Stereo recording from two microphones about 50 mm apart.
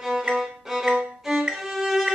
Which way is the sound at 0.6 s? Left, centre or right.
Centre.